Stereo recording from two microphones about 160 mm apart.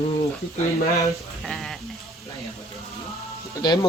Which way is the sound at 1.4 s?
Centre (ahead or behind).